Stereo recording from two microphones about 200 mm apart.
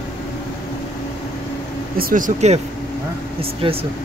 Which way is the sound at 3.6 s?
30° right (ahead or behind).